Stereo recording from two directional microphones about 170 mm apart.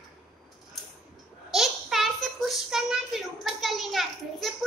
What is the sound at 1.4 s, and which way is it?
Child singing, centre (ahead or behind).